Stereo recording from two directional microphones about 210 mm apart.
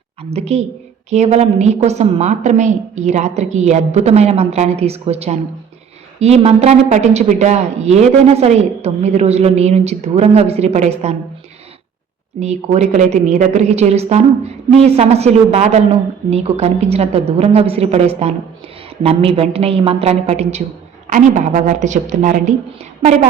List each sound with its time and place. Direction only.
0.2 s a woman's voice: 30° right (ahead or behind)
12.4 s a woman's voice: 30° right (ahead or behind)